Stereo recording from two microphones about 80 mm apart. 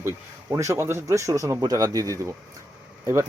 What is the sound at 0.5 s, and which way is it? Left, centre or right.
Speech, right.